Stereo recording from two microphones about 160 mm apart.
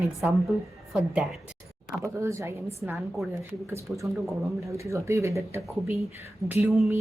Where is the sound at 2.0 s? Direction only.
20° right (ahead or behind).